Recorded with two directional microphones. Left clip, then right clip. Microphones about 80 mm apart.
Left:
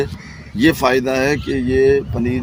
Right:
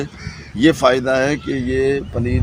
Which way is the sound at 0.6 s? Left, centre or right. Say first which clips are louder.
Right 1 dB; right.